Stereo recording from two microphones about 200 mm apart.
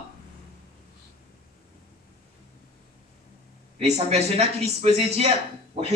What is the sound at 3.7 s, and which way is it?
A man's voice, 30° right (ahead or behind).